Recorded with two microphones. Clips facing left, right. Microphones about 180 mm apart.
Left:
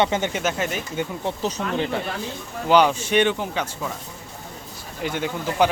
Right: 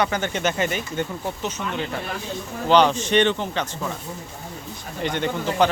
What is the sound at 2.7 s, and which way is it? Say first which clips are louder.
Speech: even; 10° left (ahead or behind).